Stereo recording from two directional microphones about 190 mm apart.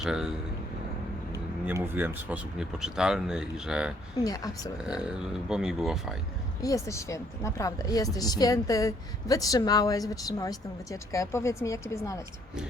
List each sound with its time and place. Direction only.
0.0 s speech: 5° right (ahead or behind)
1.6 s speech: 10° right (ahead or behind)
4.2 s speech: 20° left (ahead or behind)
4.9 s speech: 5° right (ahead or behind)
6.6 s speech: 15° left (ahead or behind)